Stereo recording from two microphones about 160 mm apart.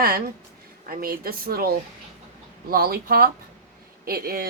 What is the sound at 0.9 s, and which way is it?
A woman's voice, 65° right (ahead or behind).